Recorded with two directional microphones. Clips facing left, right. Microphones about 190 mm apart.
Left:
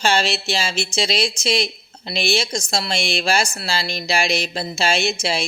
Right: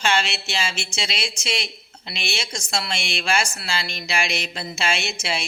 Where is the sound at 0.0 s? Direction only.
35° left (ahead or behind).